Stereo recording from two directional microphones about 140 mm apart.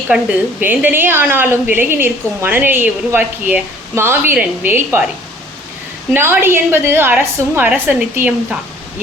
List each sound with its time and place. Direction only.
0.6 s a woman's voice: 15° right (ahead or behind)
6.1 s a woman's voice: 15° right (ahead or behind)